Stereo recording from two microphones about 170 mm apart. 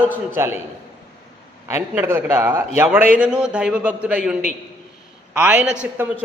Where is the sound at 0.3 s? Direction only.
15° right (ahead or behind).